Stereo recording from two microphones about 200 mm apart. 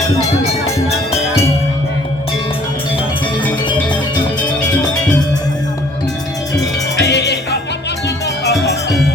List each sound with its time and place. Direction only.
7.0 s music: 55° left (ahead or behind)